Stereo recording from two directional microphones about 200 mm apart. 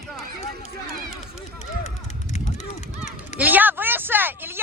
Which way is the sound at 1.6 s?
35° left (ahead or behind).